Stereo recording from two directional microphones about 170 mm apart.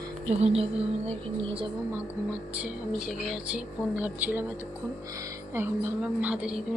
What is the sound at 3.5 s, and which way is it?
Speech, 10° right (ahead or behind).